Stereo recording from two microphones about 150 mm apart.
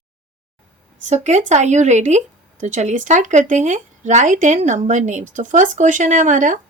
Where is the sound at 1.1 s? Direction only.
50° right (ahead or behind).